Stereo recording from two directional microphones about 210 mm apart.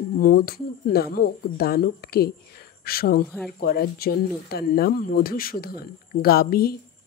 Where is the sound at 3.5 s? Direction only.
45° left (ahead or behind).